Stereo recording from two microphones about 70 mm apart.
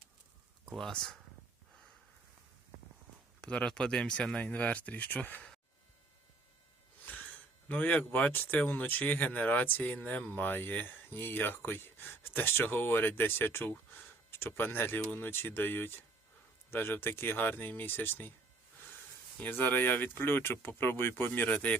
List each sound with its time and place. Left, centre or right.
0.8 s speech: centre
3.4 s speech: centre
7.1 s a sound: left
7.7 s speech: left
19.4 s speech: left